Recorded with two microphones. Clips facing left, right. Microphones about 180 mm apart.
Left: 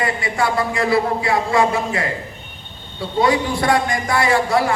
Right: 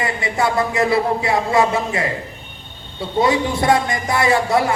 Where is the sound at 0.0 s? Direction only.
20° right (ahead or behind).